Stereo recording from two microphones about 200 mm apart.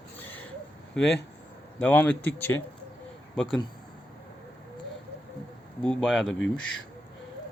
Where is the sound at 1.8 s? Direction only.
10° left (ahead or behind).